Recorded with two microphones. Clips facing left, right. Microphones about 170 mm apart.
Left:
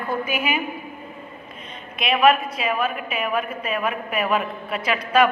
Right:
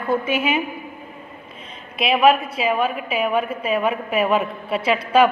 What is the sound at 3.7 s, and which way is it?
Speech, 30° right (ahead or behind).